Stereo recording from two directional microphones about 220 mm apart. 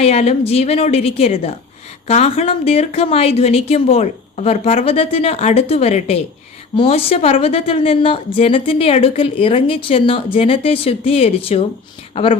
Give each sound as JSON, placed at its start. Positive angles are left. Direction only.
{"t": 0.0, "sound": "a woman's voice", "side_deg": 30}